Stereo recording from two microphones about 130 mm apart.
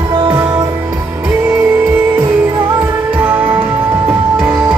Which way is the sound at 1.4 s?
10° right (ahead or behind).